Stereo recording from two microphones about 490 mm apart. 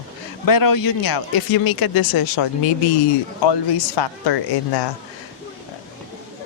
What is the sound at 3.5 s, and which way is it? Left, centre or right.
Speech, left.